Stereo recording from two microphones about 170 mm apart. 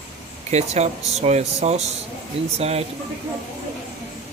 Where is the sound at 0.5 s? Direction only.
40° right (ahead or behind).